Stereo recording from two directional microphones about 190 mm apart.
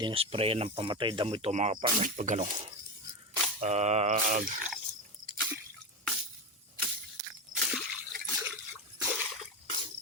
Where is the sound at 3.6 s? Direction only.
35° right (ahead or behind).